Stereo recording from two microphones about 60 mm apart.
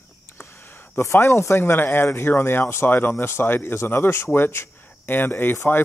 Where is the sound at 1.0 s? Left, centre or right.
Left.